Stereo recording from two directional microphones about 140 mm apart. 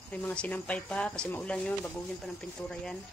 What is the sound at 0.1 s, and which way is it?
Speech, 10° left (ahead or behind).